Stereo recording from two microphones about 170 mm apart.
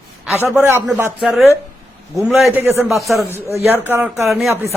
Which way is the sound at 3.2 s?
15° left (ahead or behind).